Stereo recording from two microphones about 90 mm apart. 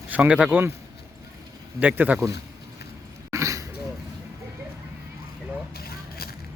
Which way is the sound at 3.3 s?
35° right (ahead or behind).